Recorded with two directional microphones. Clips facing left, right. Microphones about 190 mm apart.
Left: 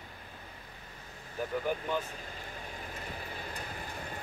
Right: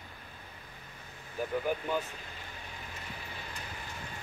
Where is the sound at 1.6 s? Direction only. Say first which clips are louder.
Even; 10° right (ahead or behind).